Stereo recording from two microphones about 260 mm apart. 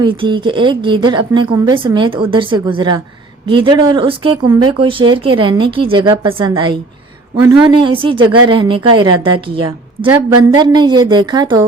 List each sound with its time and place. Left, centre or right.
0.0 s a woman's voice: centre